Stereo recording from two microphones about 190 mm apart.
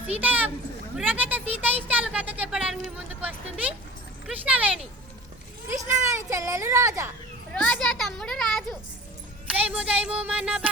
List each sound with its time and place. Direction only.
0.2 s speech: 10° right (ahead or behind)
7.5 s a child's voice: centre (ahead or behind)